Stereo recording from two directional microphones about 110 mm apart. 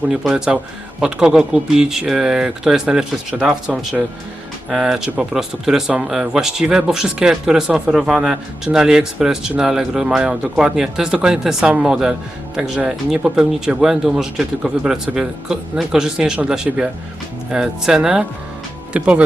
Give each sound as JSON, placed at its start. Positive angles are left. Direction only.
{"t": 0.1, "sound": "speech", "side_deg": -5}